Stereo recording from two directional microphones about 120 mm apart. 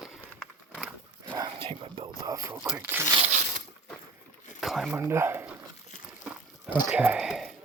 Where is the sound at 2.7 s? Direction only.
20° right (ahead or behind).